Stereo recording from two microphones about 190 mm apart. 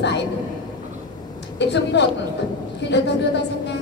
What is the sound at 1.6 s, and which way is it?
A woman's voice, 65° left (ahead or behind).